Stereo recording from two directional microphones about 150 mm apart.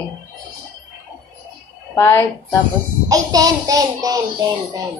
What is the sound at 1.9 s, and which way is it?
Speech, 15° left (ahead or behind).